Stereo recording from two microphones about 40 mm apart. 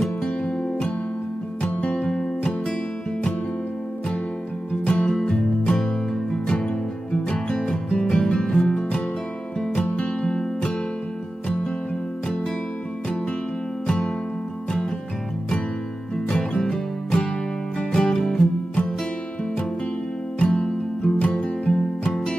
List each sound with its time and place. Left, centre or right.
0.0 s music: centre
1.6 s music: left
2.0 s music: centre
4.8 s music: left
10.0 s music: left
13.8 s music: centre
16.3 s music: left
20.3 s music: left